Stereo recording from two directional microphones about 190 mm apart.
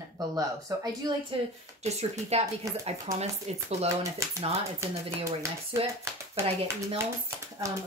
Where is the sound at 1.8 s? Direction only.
35° right (ahead or behind).